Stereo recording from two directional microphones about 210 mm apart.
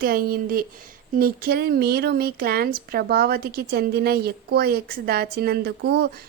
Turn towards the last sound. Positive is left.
turn(degrees=-55)  # may be behind; listen again after turning